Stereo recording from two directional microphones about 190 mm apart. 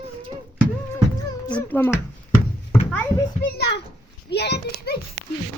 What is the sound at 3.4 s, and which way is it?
A child's voice, 60° left (ahead or behind).